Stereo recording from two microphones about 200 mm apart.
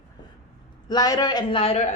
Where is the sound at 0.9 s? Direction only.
20° left (ahead or behind).